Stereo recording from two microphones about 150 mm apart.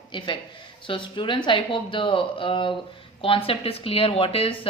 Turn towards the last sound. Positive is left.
turn(degrees=35)  # may be behind; listen again after turning